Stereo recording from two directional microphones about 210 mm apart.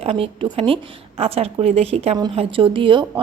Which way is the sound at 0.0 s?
25° right (ahead or behind).